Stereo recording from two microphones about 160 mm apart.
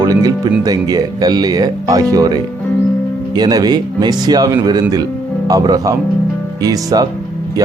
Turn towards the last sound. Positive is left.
turn(degrees=-25)  # may be behind; listen again after turning